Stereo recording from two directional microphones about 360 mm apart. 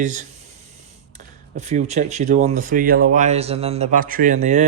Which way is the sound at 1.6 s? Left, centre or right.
Centre.